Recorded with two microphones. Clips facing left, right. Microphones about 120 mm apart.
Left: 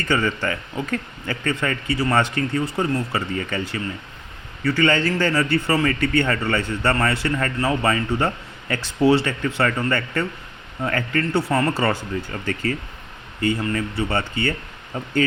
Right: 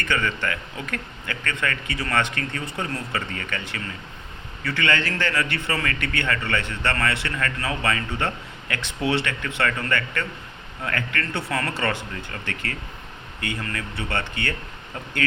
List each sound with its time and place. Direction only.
0.1 s speech: 35° left (ahead or behind)